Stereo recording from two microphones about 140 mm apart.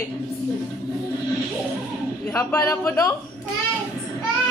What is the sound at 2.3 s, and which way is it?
Speech, 20° left (ahead or behind).